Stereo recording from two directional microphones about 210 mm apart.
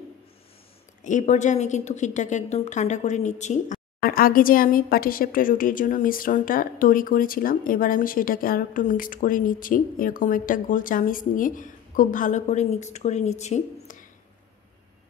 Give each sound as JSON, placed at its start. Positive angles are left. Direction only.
{"t": 1.0, "sound": "a woman's voice", "side_deg": 35}